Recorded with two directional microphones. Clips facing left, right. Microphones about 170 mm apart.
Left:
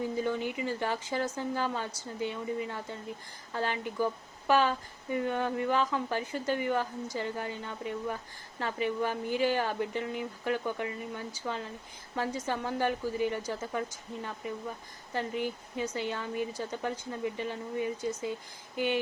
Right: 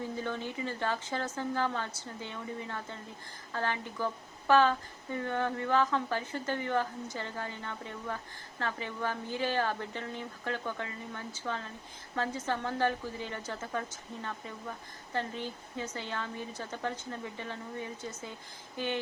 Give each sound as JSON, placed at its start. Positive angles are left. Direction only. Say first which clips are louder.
{"t": 0.0, "sound": "a woman's voice", "louder": "left 5 dB", "side_deg": 15}